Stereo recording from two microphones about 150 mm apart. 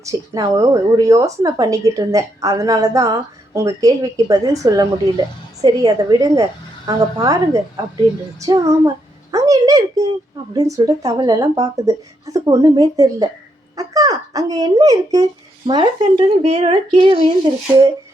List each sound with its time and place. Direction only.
0.0 s speech: 25° right (ahead or behind)
16.4 s speech: 45° right (ahead or behind)